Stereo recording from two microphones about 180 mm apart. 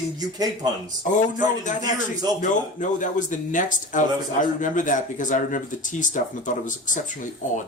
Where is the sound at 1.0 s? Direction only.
45° left (ahead or behind).